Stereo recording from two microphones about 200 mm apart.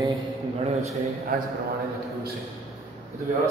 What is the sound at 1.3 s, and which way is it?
Speech, 45° right (ahead or behind).